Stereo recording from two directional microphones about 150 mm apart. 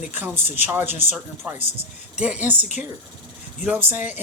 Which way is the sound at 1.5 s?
40° right (ahead or behind).